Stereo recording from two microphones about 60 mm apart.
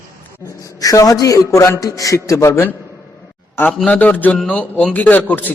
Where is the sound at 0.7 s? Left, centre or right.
Left.